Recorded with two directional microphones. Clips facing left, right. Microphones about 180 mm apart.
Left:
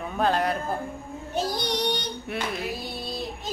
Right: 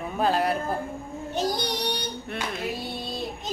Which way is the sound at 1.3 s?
Centre (ahead or behind).